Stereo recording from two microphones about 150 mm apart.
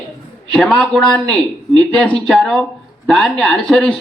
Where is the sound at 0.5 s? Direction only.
5° left (ahead or behind).